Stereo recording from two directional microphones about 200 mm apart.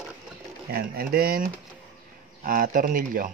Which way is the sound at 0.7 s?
50° right (ahead or behind).